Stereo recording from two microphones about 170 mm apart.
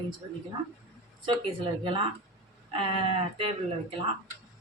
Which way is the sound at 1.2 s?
30° right (ahead or behind).